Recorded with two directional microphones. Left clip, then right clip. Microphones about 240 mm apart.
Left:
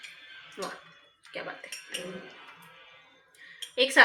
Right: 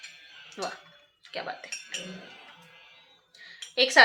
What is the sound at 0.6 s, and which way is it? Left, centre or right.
Speech, right.